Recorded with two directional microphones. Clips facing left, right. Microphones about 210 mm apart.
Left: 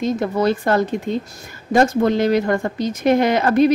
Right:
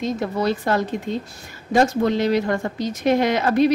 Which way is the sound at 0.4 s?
50° left (ahead or behind).